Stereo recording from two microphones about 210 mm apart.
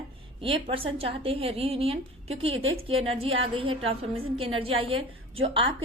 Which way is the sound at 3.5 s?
25° right (ahead or behind).